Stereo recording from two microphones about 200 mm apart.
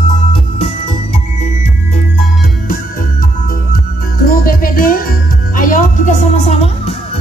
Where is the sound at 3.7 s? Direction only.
45° left (ahead or behind).